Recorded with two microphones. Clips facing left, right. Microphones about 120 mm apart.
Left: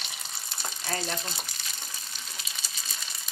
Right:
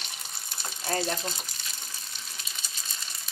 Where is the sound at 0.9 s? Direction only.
40° right (ahead or behind).